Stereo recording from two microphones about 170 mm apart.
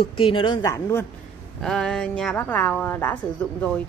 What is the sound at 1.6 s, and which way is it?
Speech, 5° left (ahead or behind).